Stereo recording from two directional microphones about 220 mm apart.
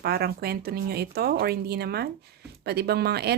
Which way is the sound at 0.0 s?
45° right (ahead or behind).